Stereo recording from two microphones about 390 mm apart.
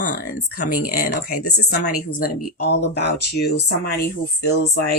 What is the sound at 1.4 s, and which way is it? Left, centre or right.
Speech, left.